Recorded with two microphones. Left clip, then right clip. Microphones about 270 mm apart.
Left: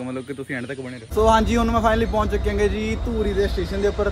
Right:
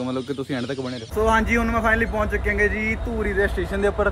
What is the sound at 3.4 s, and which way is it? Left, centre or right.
Speech, right.